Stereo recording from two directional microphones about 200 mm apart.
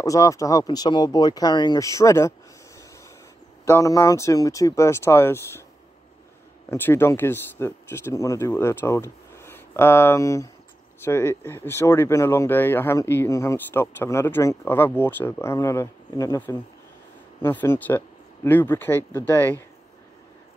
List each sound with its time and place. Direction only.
0.0 s speech: 15° left (ahead or behind)
3.6 s speech: 15° left (ahead or behind)
6.7 s speech: 10° left (ahead or behind)